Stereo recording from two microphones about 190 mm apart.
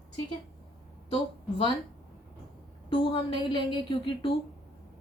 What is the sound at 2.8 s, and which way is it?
A woman's voice, 25° left (ahead or behind).